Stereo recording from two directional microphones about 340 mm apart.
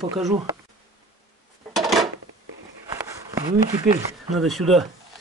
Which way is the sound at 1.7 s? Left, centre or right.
Centre.